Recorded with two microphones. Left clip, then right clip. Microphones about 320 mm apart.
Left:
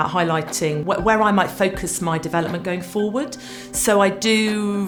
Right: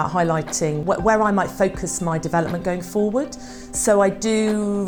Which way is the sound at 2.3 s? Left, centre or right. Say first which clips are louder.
Right 1 dB; right.